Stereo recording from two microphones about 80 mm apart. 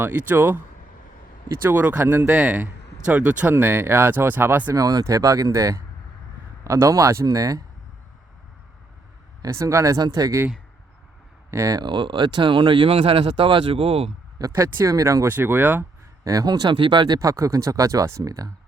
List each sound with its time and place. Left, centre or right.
0.0 s speech: right
1.6 s speech: right
4.7 s speech: right
9.4 s speech: right
11.5 s speech: right
11.8 s speech: right
14.3 s speech: right
15.3 s speech: right
16.2 s speech: right
16.6 s speech: right
17.2 s speech: right